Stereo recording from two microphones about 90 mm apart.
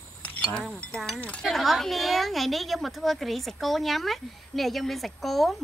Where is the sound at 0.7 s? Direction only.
10° left (ahead or behind).